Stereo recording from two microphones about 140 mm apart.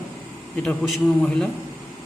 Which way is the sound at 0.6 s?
5° left (ahead or behind).